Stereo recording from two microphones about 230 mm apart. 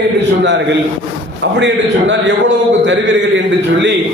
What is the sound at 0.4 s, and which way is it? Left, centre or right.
A man's voice, right.